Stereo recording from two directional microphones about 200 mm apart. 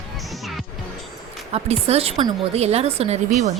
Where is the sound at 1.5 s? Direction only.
30° right (ahead or behind).